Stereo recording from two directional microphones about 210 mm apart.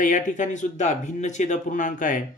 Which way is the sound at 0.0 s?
40° left (ahead or behind).